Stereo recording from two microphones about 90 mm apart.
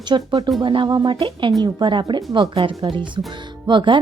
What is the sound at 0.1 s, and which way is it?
A woman's voice, 60° right (ahead or behind).